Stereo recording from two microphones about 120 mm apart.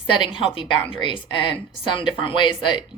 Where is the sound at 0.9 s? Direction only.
45° left (ahead or behind).